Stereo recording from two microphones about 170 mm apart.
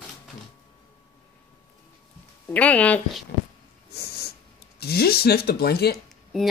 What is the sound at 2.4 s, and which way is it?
Speech, 10° left (ahead or behind).